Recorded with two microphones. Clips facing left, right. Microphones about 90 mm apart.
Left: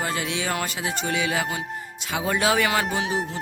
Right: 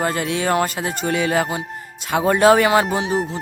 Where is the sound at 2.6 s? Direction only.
35° right (ahead or behind).